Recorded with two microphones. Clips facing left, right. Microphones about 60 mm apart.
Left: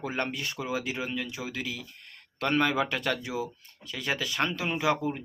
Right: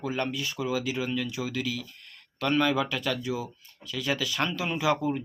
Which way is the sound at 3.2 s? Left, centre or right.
Left.